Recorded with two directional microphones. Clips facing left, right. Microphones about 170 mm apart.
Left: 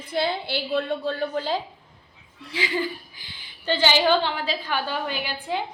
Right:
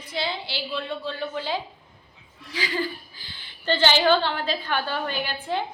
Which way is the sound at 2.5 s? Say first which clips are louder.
Left 1 dB; 20° left (ahead or behind).